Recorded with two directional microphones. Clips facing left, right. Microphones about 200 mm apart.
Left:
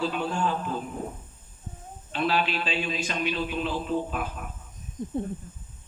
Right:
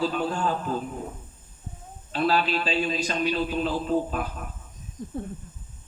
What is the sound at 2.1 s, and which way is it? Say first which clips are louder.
A man's voice: right 3 dB; 40° right (ahead or behind).